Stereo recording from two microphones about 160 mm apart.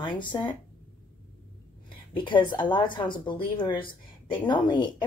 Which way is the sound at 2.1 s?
30° left (ahead or behind).